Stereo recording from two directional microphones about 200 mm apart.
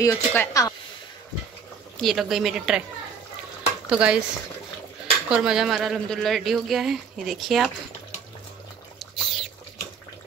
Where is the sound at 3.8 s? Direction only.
5° right (ahead or behind).